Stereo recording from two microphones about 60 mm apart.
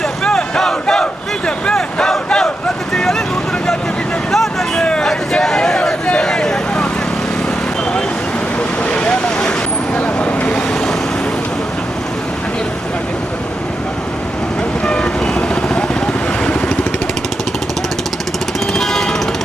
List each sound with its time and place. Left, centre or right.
0.3 s battle cry: centre
1.5 s a sound: centre
2.9 s vehicle: centre
4.3 s a sound: centre
8.8 s vehicle: centre
14.8 s vehicle: centre
18.7 s jackhammer: centre